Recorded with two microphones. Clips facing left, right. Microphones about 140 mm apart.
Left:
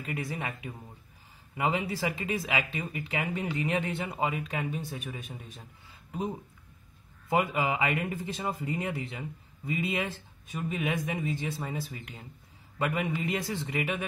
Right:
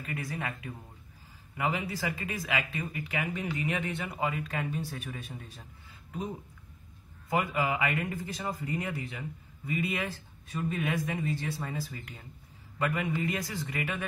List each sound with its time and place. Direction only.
0.0 s speech: 20° left (ahead or behind)
7.2 s speech: 25° left (ahead or behind)